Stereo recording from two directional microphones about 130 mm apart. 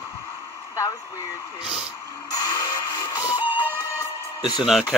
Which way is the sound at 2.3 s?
30° left (ahead or behind).